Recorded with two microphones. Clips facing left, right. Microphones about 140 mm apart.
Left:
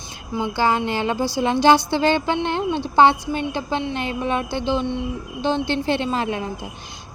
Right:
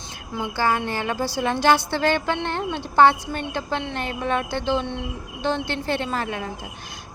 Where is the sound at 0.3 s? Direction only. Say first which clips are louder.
Left 3 dB; 20° left (ahead or behind).